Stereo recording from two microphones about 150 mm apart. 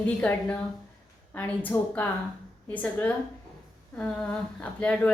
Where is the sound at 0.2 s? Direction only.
10° left (ahead or behind).